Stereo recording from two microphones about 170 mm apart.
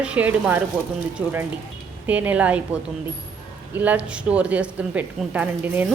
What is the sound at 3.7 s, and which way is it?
A woman's voice, 10° right (ahead or behind).